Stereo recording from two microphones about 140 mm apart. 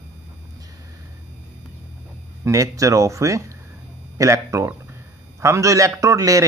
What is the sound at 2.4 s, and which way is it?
A man's voice, 25° right (ahead or behind).